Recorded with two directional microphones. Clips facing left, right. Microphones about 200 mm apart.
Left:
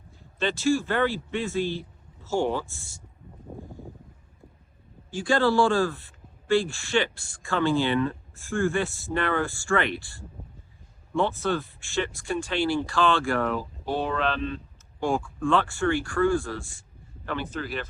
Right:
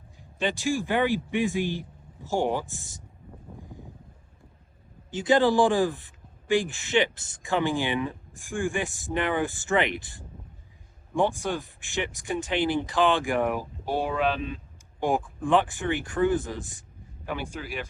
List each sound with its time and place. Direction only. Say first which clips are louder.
0.2 s speech: left 1 dB; 15° right (ahead or behind)
5.1 s speech: right 1 dB; 20° right (ahead or behind)